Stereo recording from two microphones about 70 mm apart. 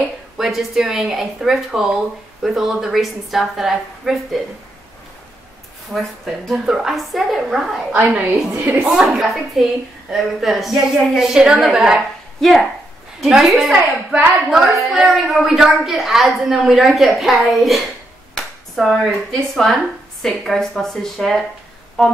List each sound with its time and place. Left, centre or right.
0.4 s a woman's voice: centre
5.9 s a woman's voice: centre
7.9 s a woman's voice: right
8.8 s a woman's voice: centre
12.4 s a woman's voice: centre
22.0 s music: centre